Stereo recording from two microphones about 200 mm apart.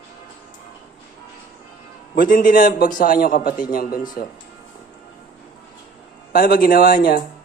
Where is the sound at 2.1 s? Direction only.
45° left (ahead or behind).